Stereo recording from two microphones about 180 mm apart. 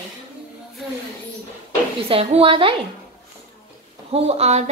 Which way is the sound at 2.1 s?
30° right (ahead or behind).